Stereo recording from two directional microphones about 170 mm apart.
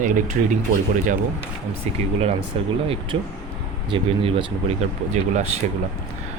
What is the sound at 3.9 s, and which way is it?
Speech, 30° right (ahead or behind).